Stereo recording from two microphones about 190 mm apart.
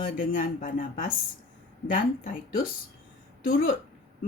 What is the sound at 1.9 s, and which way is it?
Speech, 45° left (ahead or behind).